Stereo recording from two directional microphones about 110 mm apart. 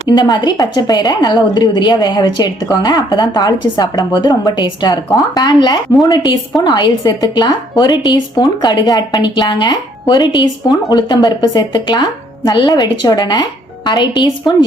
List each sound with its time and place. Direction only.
0.1 s a woman's voice: 40° left (ahead or behind)